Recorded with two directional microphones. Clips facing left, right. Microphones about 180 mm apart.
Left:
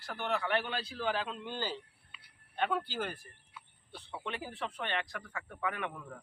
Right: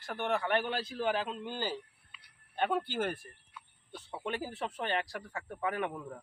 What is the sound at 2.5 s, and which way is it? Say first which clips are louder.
A man's voice: right 2 dB; 40° right (ahead or behind).